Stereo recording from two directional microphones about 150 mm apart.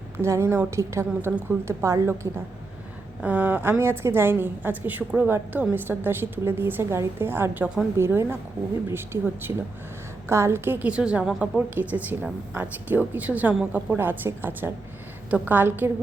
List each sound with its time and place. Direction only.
0.2 s a woman's voice: 20° right (ahead or behind)
3.2 s a woman's voice: 10° right (ahead or behind)